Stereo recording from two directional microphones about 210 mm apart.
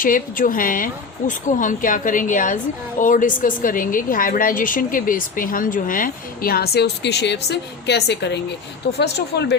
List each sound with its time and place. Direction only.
0.0 s a woman's voice: 40° left (ahead or behind)